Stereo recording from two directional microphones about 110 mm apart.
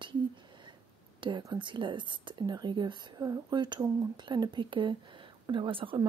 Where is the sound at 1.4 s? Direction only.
45° right (ahead or behind).